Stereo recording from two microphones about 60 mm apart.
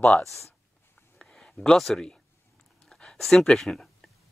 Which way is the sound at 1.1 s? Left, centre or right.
Centre.